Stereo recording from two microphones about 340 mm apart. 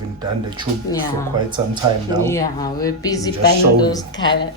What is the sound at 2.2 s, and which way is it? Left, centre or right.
Speech, centre.